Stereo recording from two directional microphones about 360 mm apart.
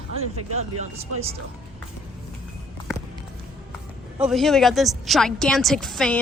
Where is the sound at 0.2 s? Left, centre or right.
Right.